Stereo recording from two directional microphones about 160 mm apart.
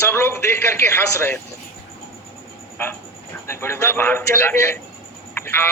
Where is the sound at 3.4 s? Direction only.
15° left (ahead or behind).